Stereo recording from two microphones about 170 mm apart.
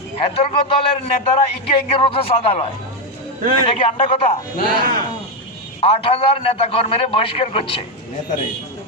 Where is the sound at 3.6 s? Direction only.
35° left (ahead or behind).